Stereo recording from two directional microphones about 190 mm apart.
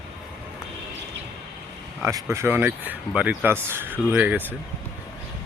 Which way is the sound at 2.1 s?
15° right (ahead or behind).